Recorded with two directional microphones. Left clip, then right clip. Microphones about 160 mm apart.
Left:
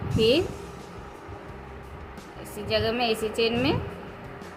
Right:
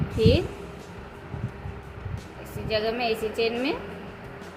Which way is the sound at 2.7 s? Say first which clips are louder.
Left 1 dB; 20° left (ahead or behind).